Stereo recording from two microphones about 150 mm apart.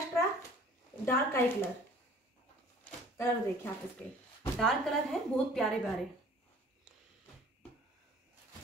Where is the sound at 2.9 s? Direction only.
15° left (ahead or behind).